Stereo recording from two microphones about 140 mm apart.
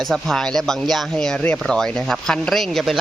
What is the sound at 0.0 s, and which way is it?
A man's voice, centre (ahead or behind).